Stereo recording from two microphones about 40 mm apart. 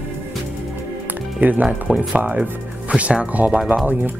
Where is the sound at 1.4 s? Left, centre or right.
Right.